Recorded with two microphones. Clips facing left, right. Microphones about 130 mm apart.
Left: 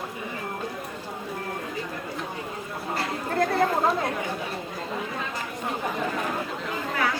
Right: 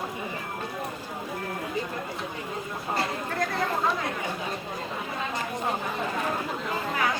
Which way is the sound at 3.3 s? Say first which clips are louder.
Left 7 dB; 35° left (ahead or behind).